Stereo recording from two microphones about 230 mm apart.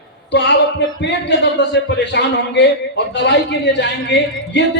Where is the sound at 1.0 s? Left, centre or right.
Left.